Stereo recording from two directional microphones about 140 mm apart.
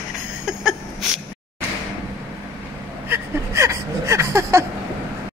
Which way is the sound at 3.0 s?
20° right (ahead or behind).